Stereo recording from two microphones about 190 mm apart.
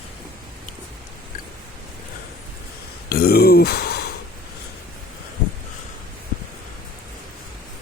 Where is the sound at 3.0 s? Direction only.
55° left (ahead or behind).